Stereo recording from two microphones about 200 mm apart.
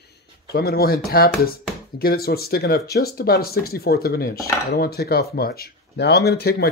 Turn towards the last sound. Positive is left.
turn(degrees=50)  # may be behind; listen again after turning